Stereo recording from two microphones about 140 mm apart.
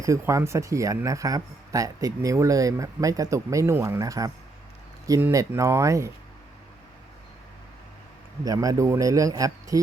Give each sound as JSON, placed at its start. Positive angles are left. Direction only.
{"t": 0.0, "sound": "speech", "side_deg": -20}
{"t": 8.4, "sound": "speech", "side_deg": -25}